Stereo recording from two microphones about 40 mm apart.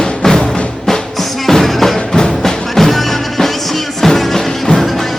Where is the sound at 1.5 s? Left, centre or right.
Centre.